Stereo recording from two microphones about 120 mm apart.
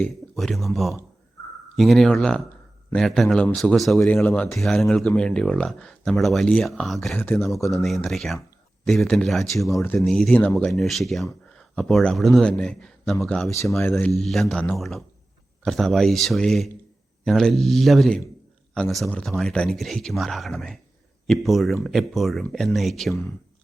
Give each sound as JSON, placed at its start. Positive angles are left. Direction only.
{"t": 0.3, "sound": "speech", "side_deg": 0}
{"t": 4.2, "sound": "speech", "side_deg": 20}
{"t": 4.5, "sound": "speech", "side_deg": 0}
{"t": 7.2, "sound": "speech", "side_deg": 20}
{"t": 7.7, "sound": "speech", "side_deg": 0}
{"t": 9.8, "sound": "speech", "side_deg": 15}
{"t": 10.1, "sound": "speech", "side_deg": 5}